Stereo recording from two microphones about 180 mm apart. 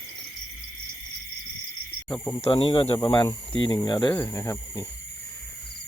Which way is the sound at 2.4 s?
30° left (ahead or behind).